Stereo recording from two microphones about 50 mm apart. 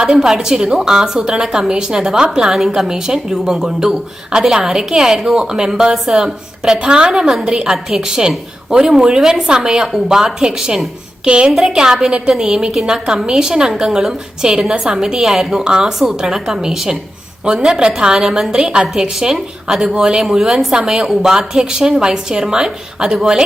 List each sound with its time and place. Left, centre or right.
0.0 s a woman's voice: centre
11.3 s a woman's voice: right